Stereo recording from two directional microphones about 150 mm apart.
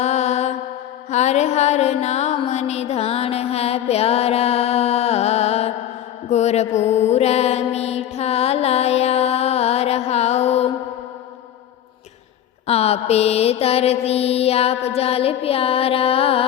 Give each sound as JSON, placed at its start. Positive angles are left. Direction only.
{"t": 0.0, "sound": "mantra", "side_deg": 50}
{"t": 1.1, "sound": "music", "side_deg": 50}
{"t": 6.2, "sound": "mantra", "side_deg": 45}
{"t": 12.6, "sound": "mantra", "side_deg": 45}